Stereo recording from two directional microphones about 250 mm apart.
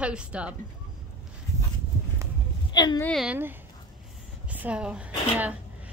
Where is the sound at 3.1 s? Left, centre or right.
Centre.